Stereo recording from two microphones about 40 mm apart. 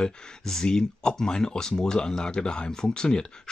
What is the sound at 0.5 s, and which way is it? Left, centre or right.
Speech, centre.